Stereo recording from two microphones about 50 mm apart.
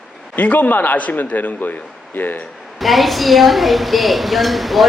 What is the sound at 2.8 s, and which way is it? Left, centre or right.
A woman's voice, centre.